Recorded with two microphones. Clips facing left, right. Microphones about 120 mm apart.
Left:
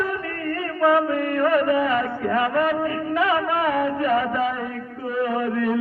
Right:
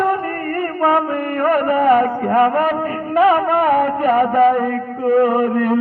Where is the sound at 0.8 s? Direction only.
45° right (ahead or behind).